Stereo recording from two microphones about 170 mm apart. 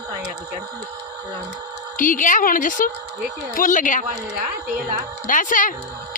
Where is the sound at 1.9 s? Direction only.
50° left (ahead or behind).